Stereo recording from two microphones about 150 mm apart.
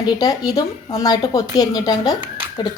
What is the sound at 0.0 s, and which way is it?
Speech, 25° left (ahead or behind).